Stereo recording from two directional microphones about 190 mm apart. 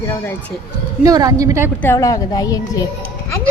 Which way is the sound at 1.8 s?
15° left (ahead or behind).